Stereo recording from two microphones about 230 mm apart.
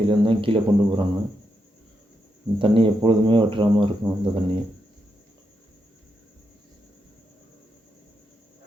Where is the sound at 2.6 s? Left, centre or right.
Right.